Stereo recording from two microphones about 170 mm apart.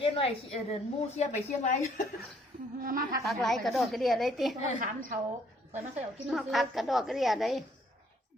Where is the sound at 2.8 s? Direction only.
60° right (ahead or behind).